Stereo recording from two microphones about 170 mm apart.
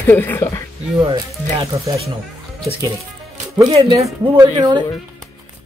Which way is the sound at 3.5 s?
25° right (ahead or behind).